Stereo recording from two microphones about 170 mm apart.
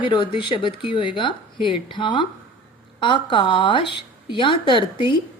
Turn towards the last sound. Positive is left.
turn(degrees=30)  # may be behind; listen again after turning